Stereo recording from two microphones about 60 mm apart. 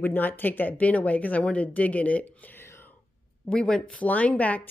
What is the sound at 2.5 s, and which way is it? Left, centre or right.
Whispering, left.